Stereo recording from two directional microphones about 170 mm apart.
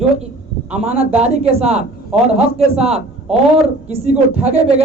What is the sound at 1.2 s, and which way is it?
A woman's voice, 40° right (ahead or behind).